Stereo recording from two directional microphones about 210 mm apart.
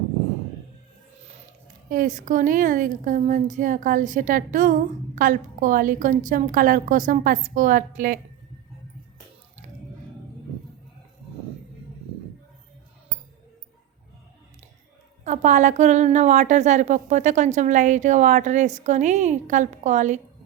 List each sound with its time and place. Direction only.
1.9 s a woman's voice: 40° right (ahead or behind)
15.2 s a woman's voice: 35° right (ahead or behind)